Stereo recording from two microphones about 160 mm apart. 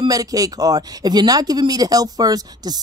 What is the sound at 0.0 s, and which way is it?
Speech, 20° right (ahead or behind).